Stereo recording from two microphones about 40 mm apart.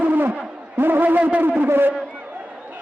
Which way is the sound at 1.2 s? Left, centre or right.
Right.